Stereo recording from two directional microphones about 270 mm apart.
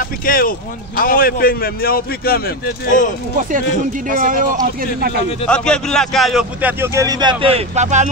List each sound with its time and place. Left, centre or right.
0.0 s a man's voice: left
4.1 s speech: right
5.5 s a man's voice: centre; by 8.1 s right